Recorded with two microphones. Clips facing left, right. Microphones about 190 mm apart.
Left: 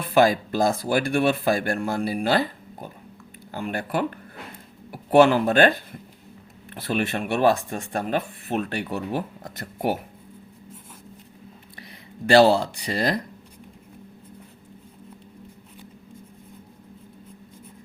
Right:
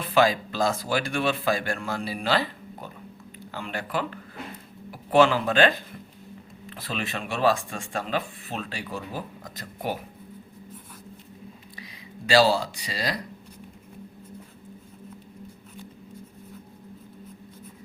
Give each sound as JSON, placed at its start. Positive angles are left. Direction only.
{"t": 0.1, "sound": "speech", "side_deg": 50}
{"t": 7.2, "sound": "speech", "side_deg": 60}
{"t": 11.8, "sound": "speech", "side_deg": 55}